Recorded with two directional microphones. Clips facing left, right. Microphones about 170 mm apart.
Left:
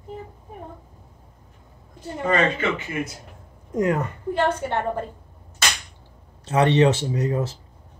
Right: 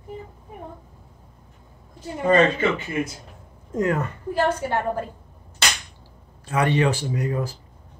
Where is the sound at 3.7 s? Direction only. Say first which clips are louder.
Left 1 dB; 15° left (ahead or behind).